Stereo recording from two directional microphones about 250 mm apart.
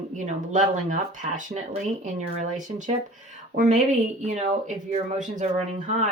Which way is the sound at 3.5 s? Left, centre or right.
Right.